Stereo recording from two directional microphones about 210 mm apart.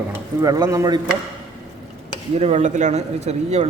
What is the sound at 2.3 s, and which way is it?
A man's voice, 30° right (ahead or behind).